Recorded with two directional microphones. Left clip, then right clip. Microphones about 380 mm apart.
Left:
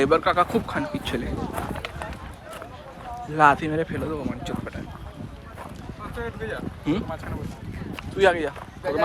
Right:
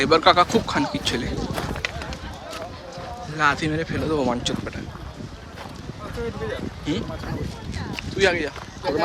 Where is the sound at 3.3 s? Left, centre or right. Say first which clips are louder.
Left 3 dB; centre.